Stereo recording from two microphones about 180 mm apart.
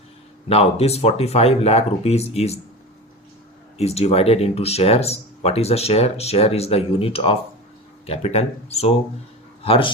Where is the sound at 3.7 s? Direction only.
35° left (ahead or behind).